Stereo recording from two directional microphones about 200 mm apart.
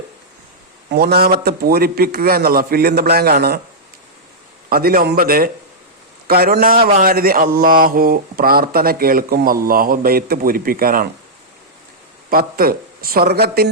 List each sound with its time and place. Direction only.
0.9 s speech: 50° right (ahead or behind)
4.7 s speech: 50° right (ahead or behind)
12.3 s speech: 45° right (ahead or behind)